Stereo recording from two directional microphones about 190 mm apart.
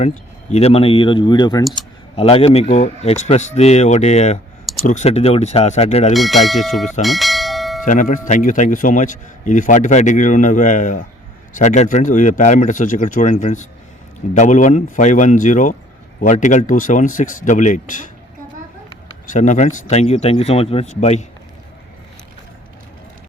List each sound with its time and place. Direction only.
0.5 s a man's voice: 30° left (ahead or behind)
6.1 s speech: centre (ahead or behind)
7.0 s bell: centre (ahead or behind)
7.9 s a man's voice: 45° left (ahead or behind)
19.3 s a man's voice: 40° left (ahead or behind)